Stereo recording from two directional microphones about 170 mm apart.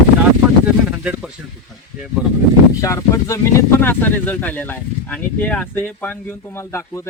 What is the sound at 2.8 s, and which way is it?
Speech, 20° left (ahead or behind).